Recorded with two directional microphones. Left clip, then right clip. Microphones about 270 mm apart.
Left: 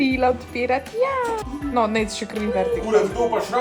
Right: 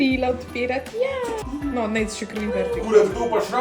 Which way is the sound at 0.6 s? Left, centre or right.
Left.